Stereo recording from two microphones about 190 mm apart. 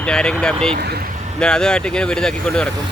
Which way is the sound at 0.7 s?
55° right (ahead or behind).